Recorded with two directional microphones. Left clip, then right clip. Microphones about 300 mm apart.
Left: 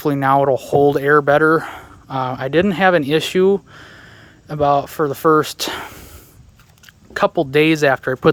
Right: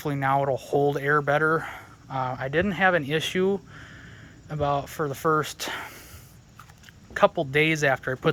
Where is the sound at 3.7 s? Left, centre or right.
Centre.